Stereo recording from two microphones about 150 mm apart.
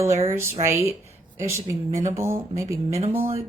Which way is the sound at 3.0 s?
40° right (ahead or behind).